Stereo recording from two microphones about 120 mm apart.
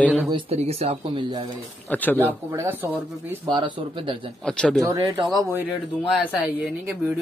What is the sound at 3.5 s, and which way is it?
Speech, 45° right (ahead or behind).